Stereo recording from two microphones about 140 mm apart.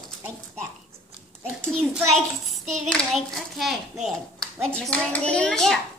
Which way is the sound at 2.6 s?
55° right (ahead or behind).